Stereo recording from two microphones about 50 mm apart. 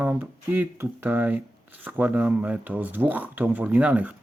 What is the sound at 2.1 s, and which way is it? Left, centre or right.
Speech, right.